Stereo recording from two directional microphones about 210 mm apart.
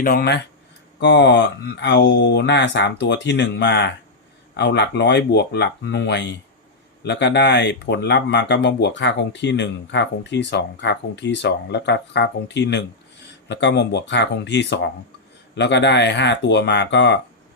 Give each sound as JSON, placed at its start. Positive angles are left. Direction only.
{"t": 0.0, "sound": "speech", "side_deg": 45}
{"t": 0.9, "sound": "speech", "side_deg": 55}